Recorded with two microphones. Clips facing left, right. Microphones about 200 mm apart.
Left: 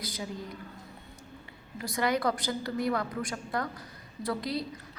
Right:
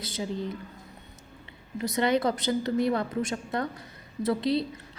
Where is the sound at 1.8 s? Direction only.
25° right (ahead or behind).